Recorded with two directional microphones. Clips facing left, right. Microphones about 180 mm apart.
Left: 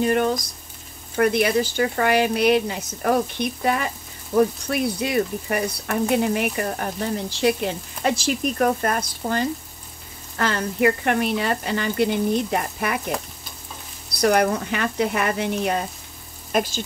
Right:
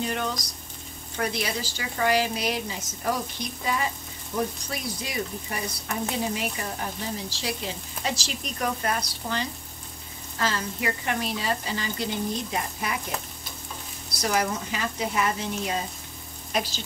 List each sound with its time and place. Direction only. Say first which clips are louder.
0.0 s speech: left 9 dB; 50° left (ahead or behind)
10.3 s speech: left 5 dB; 60° left (ahead or behind)
14.1 s speech: left 8 dB; 60° left (ahead or behind)
16.5 s speech: left 6 dB; 50° left (ahead or behind)